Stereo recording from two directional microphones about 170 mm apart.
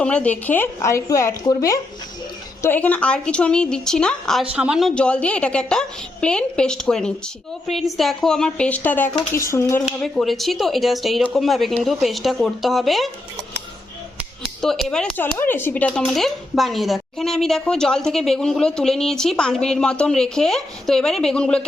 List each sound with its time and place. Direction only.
0.0 s a woman's voice: 5° left (ahead or behind)
9.8 s speech: centre (ahead or behind)
14.8 s speech: 10° left (ahead or behind)